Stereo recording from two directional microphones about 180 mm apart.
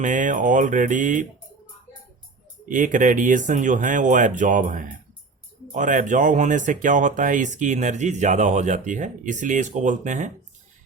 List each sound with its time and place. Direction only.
0.0 s speech: 45° right (ahead or behind)
2.6 s speech: 45° right (ahead or behind)